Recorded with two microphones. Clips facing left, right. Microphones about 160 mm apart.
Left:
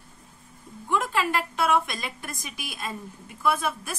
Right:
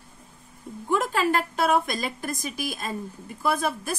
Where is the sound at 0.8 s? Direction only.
40° right (ahead or behind).